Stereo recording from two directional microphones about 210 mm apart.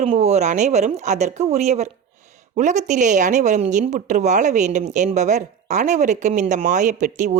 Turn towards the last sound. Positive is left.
turn(degrees=-35)  # may be behind; listen again after turning